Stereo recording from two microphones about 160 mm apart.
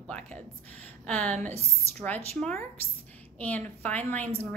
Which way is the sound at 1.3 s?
45° right (ahead or behind).